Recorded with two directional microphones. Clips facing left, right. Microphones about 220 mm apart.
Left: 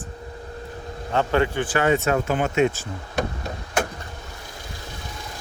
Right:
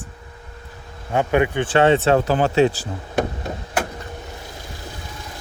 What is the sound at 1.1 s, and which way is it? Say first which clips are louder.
Speech: right 3 dB; 15° right (ahead or behind).